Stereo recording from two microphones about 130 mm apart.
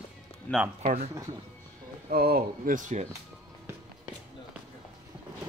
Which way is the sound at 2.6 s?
80° right.